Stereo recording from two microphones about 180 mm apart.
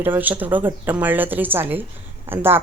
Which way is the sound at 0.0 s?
10° right (ahead or behind).